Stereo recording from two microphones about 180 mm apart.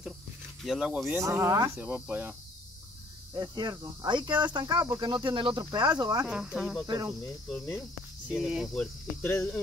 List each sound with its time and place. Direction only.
0.7 s speech: 5° right (ahead or behind)
3.3 s speech: 20° right (ahead or behind)
6.2 s cricket: 5° right (ahead or behind)
9.2 s speech: 10° left (ahead or behind)